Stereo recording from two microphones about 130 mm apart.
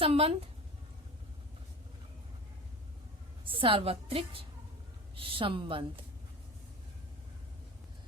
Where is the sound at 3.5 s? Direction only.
45° right (ahead or behind).